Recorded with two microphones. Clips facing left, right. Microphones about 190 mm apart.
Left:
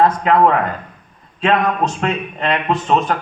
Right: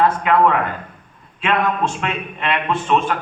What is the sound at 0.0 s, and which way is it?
A man's voice, 40° left (ahead or behind).